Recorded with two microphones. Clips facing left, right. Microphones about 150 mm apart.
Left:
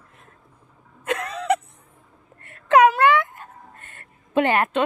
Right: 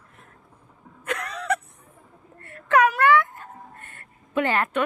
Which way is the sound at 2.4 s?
20° left (ahead or behind).